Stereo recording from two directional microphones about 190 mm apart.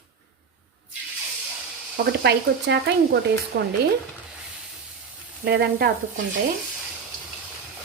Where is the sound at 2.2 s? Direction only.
60° right (ahead or behind).